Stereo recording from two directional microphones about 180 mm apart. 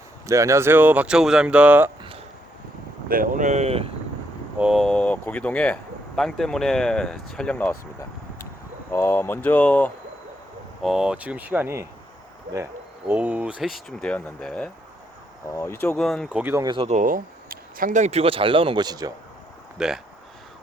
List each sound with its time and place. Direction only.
0.3 s speech: 15° right (ahead or behind)
3.1 s speech: 50° right (ahead or behind)
4.5 s speech: 5° right (ahead or behind)
8.9 s speech: 15° left (ahead or behind)
10.8 s speech: 5° right (ahead or behind)
13.1 s speech: 10° right (ahead or behind)
15.4 s speech: 15° left (ahead or behind)
16.4 s speech: 15° right (ahead or behind)
16.6 s speech: 30° right (ahead or behind)
16.9 s speech: 45° right (ahead or behind); by 19.1 s 20° right (ahead or behind)
19.8 s speech: 5° right (ahead or behind)